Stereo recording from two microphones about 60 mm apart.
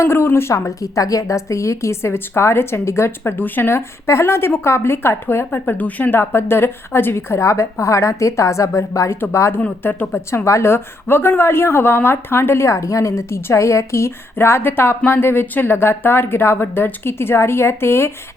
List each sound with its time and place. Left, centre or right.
0.0 s a woman's voice: left
0.8 s a woman's voice: left
9.8 s speech: left
10.2 s a woman's voice: left
14.3 s speech: left